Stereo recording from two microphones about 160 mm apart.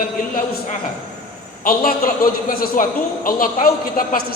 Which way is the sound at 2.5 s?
65° left (ahead or behind).